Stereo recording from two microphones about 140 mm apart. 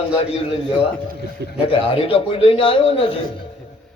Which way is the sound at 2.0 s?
40° left (ahead or behind).